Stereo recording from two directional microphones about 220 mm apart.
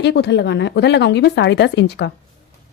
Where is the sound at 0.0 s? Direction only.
50° left (ahead or behind).